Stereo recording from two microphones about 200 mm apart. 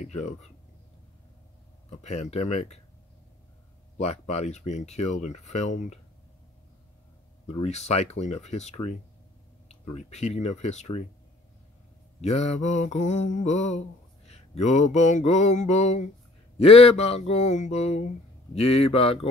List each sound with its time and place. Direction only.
0.0 s mantra: 35° left (ahead or behind)
1.9 s mantra: 35° left (ahead or behind)
4.0 s mantra: 30° left (ahead or behind)
7.5 s mantra: 30° left (ahead or behind)
12.2 s mantra: 30° left (ahead or behind)
18.5 s speech: 30° left (ahead or behind)